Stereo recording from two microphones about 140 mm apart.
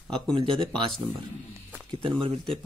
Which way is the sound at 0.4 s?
35° right (ahead or behind).